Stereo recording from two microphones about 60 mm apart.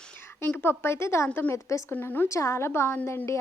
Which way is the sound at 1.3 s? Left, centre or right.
Left.